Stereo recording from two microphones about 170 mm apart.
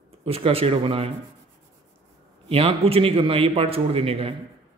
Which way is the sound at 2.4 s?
35° right (ahead or behind).